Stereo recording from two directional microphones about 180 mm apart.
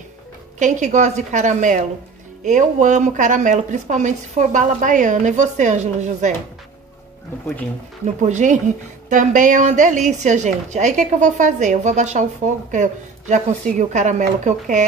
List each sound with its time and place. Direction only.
0.6 s speech: 45° right (ahead or behind)
8.3 s speech: 45° right (ahead or behind)